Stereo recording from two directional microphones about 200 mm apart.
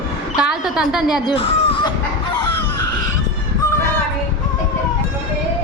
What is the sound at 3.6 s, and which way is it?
Child singing, 15° left (ahead or behind).